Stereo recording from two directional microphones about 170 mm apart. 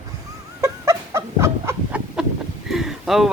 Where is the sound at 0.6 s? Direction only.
20° right (ahead or behind).